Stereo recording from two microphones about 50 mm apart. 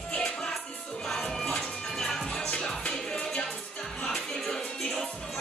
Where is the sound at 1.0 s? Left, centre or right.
Centre.